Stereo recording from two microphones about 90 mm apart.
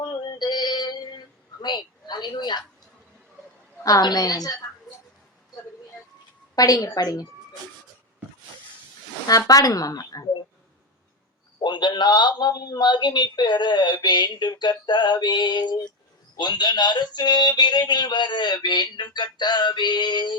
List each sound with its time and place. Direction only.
0.0 s synthetic singing: 55° left (ahead or behind)
1.6 s a woman's voice: 55° left (ahead or behind)
3.8 s a man's voice: 45° left (ahead or behind)
6.6 s a man's voice: 40° left (ahead or behind)
9.2 s a man's voice: 45° left (ahead or behind)
11.6 s a man's voice: 55° left (ahead or behind)